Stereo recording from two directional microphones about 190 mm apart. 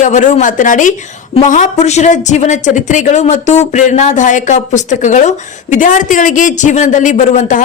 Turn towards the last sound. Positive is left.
turn(degrees=40)  # may be behind; listen again after turning